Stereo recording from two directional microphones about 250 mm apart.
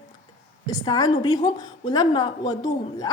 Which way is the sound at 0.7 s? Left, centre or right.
Centre.